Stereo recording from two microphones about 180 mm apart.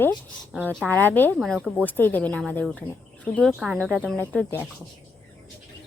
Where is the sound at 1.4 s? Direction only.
Centre (ahead or behind).